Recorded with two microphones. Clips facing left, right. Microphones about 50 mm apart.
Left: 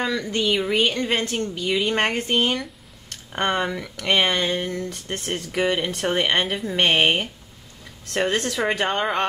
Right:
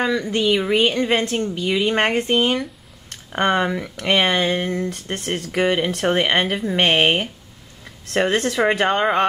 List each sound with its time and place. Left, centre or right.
0.0 s a woman's voice: centre
6.3 s a woman's voice: centre